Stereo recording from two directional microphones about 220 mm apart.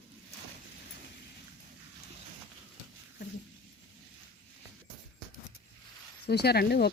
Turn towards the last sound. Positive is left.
turn(degrees=45)  # may be behind; listen again after turning